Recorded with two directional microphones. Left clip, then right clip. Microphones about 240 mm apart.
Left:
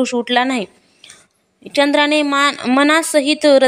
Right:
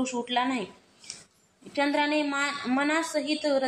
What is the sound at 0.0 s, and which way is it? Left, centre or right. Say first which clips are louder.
A woman's voice: left 12 dB; left.